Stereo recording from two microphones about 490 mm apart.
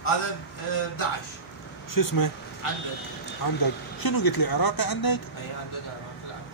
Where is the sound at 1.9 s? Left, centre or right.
Left.